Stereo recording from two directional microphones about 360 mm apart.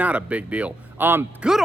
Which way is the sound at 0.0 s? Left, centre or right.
Centre.